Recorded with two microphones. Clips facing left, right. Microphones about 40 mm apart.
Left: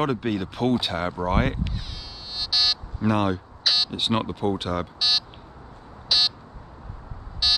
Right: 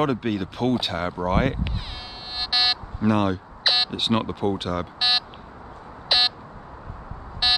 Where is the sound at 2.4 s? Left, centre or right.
Right.